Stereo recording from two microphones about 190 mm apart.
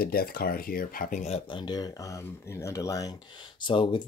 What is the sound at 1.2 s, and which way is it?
Speech, 30° left (ahead or behind).